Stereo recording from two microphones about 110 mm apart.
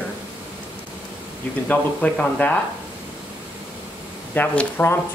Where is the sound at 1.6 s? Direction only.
15° left (ahead or behind).